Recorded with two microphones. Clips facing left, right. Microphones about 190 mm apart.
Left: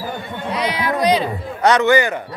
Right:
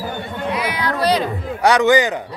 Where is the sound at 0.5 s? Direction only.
25° left (ahead or behind).